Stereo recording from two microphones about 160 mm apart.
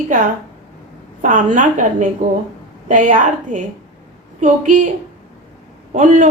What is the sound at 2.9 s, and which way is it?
A woman's voice, 55° right (ahead or behind).